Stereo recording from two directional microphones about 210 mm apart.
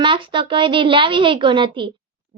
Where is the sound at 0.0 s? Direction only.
25° right (ahead or behind).